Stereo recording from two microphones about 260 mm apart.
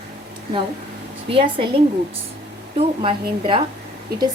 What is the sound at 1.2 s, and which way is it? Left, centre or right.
A woman's voice, centre.